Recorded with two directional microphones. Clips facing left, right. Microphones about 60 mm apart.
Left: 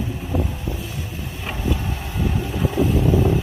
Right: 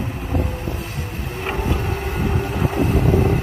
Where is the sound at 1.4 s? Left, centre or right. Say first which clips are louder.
Right 3 dB; right.